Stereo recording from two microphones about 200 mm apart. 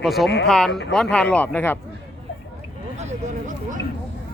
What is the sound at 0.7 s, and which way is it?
Speech, 60° left (ahead or behind).